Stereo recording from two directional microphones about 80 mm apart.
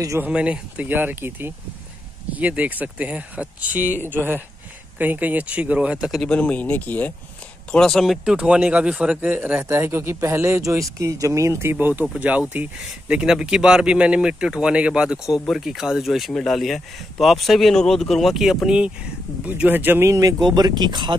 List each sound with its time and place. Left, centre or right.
0.2 s speech: centre
6.2 s speech: centre
7.7 s speech: centre
8.4 s speech: centre; by 11.7 s right
11.7 s speech: right
19.4 s speech: right
20.1 s speech: right